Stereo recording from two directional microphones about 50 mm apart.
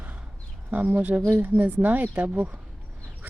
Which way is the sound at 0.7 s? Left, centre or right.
Right.